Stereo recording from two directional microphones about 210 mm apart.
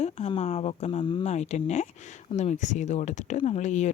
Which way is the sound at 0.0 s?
30° left (ahead or behind).